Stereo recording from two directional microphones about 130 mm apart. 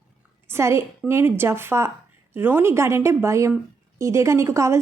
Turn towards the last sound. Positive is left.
turn(degrees=-20)  # may be behind; listen again after turning